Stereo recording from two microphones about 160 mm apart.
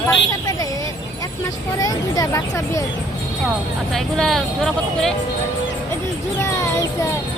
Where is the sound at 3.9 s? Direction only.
Centre (ahead or behind).